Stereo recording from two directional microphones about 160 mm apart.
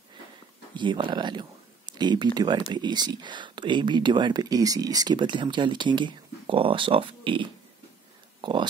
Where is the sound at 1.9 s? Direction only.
25° right (ahead or behind).